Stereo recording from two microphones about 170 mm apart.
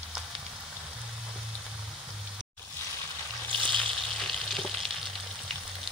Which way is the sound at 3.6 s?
5° left (ahead or behind).